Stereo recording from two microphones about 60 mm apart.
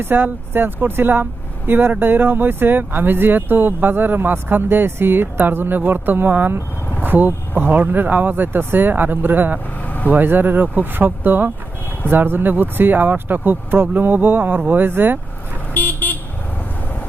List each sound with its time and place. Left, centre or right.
0.0 s speech: right
9.8 s vehicle: left
10.1 s speech: right
15.7 s vehicle: left